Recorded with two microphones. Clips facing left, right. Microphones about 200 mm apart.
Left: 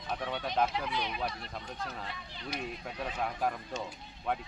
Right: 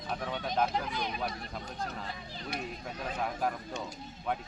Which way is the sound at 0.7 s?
45° right (ahead or behind).